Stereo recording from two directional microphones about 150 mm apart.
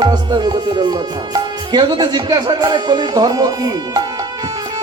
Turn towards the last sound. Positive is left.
turn(degrees=-25)  # may be behind; listen again after turning